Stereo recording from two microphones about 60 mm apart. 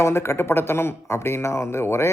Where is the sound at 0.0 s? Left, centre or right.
Left.